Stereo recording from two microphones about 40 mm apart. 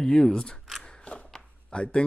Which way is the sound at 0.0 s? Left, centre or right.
Centre.